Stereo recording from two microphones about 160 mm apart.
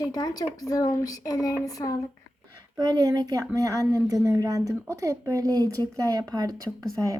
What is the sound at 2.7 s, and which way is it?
A woman's voice, 25° right (ahead or behind).